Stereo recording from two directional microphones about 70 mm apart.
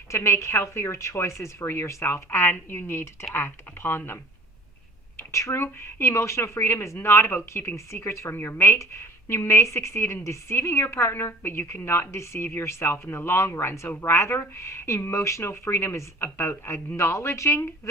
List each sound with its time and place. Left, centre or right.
0.1 s a woman's voice: left